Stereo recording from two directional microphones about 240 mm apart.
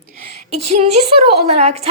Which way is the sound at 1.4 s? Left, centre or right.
Right.